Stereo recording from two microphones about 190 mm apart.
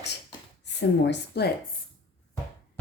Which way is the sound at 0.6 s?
65° left (ahead or behind).